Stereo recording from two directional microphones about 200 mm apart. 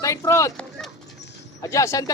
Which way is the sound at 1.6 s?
15° left (ahead or behind).